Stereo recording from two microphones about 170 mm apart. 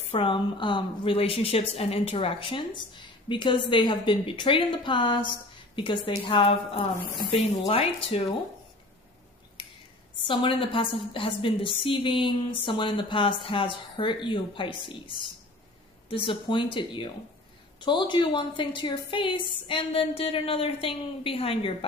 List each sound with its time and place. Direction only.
0.1 s a woman's voice: 30° left (ahead or behind)
10.2 s a woman's voice: 30° left (ahead or behind)